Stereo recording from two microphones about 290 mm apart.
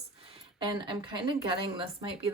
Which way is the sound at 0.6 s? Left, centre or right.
Centre.